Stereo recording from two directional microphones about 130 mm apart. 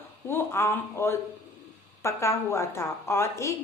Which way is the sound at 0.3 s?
20° left (ahead or behind).